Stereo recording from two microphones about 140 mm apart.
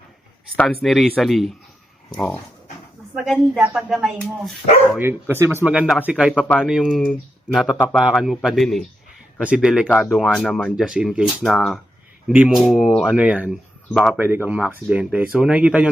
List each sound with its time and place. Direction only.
0.4 s speech: 10° left (ahead or behind)
5.3 s speech: 15° right (ahead or behind)
13.9 s speech: 5° left (ahead or behind)
14.2 s speech: 15° right (ahead or behind)